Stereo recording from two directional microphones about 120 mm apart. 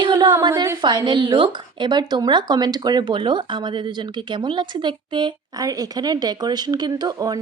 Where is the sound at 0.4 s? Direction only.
40° right (ahead or behind).